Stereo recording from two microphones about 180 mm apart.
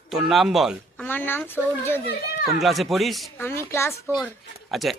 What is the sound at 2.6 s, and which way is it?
Speech, centre (ahead or behind).